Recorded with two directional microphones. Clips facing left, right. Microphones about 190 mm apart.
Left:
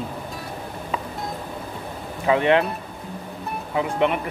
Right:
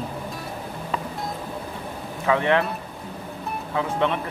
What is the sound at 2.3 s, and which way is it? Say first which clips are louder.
Speech: left 3 dB; 20° left (ahead or behind).